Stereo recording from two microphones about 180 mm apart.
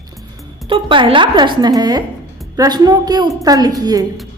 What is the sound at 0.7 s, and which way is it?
A woman's voice, 30° right (ahead or behind).